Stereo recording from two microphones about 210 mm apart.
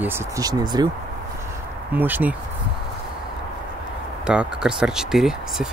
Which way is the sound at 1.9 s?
10° right (ahead or behind).